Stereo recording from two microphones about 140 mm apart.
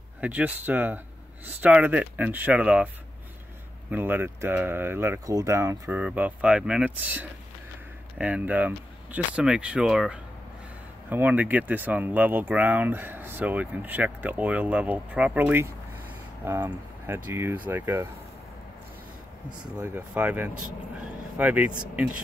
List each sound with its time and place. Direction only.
0.2 s speech: 10° right (ahead or behind)
3.9 s speech: 15° right (ahead or behind)
19.6 s speech: 10° right (ahead or behind)